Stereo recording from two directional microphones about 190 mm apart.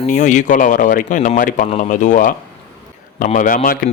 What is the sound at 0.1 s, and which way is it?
Speech, 40° left (ahead or behind).